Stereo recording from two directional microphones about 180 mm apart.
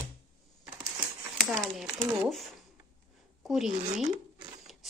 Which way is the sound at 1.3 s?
Centre (ahead or behind).